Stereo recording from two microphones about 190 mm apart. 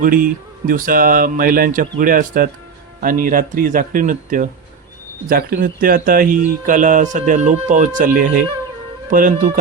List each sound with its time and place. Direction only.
0.0 s speech: 45° right (ahead or behind)